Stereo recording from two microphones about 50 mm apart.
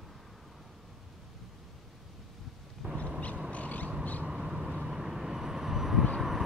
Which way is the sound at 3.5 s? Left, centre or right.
Left.